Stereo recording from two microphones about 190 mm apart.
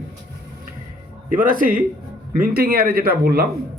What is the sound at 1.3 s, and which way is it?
Speech, 45° right (ahead or behind).